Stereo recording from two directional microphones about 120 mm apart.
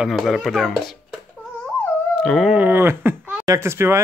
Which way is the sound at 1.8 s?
5° left (ahead or behind).